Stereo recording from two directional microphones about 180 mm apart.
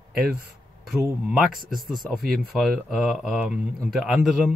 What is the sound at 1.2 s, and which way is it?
Speech, 5° right (ahead or behind).